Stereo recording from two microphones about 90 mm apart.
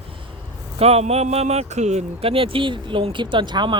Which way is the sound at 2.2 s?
90° right.